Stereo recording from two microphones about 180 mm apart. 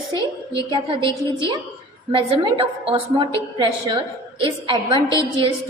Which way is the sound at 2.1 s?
30° right (ahead or behind).